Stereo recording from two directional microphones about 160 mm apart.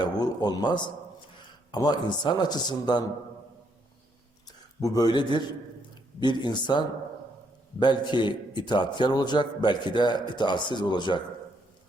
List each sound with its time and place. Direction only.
0.0 s a man's voice: 25° left (ahead or behind)
4.4 s a sound: 25° left (ahead or behind)
5.9 s a man's voice: 25° left (ahead or behind)